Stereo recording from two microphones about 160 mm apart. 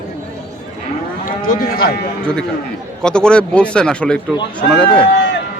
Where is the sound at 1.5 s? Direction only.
70° left (ahead or behind).